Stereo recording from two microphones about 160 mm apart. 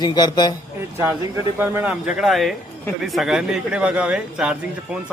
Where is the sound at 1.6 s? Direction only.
10° right (ahead or behind).